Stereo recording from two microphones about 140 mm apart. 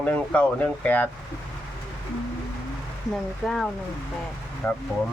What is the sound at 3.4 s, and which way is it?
Speech, centre (ahead or behind).